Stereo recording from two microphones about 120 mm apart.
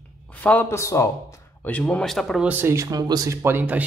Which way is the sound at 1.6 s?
10° left (ahead or behind).